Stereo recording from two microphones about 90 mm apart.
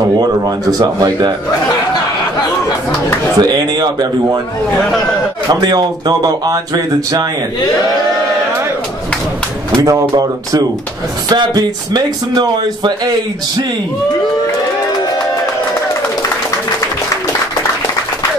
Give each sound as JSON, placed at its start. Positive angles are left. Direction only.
{"t": 0.2, "sound": "speech", "side_deg": -45}
{"t": 3.3, "sound": "speech", "side_deg": -50}
{"t": 5.5, "sound": "speech", "side_deg": -50}
{"t": 9.8, "sound": "speech", "side_deg": -40}